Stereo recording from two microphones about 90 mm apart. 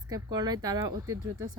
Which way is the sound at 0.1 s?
50° right (ahead or behind).